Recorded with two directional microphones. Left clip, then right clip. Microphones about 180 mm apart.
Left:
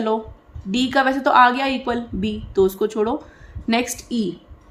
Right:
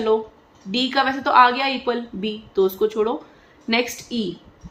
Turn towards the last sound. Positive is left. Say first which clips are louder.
# even
turn(degrees=45)  # may be behind; listen again after turning